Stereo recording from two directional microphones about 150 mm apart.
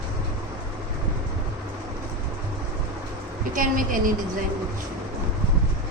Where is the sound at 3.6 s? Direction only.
65° right (ahead or behind).